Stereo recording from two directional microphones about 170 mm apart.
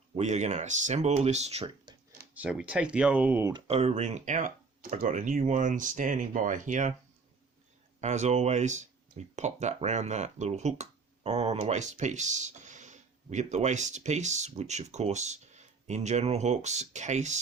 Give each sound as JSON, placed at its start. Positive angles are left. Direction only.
{"t": 0.2, "sound": "speech", "side_deg": -45}
{"t": 2.3, "sound": "speech", "side_deg": -5}
{"t": 3.5, "sound": "speech", "side_deg": -35}
{"t": 8.0, "sound": "speech", "side_deg": -40}